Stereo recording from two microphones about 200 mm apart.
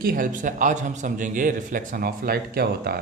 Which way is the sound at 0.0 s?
45° right (ahead or behind).